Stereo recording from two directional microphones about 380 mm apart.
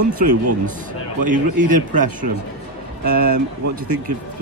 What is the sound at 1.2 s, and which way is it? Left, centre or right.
Speech, centre.